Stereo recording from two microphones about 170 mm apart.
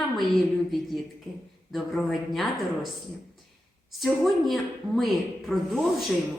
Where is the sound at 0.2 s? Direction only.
Centre (ahead or behind).